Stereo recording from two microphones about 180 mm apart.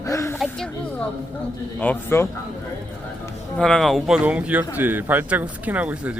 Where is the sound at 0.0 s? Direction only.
15° left (ahead or behind).